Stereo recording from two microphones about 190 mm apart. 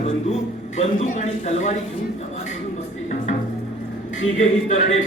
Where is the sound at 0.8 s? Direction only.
35° left (ahead or behind).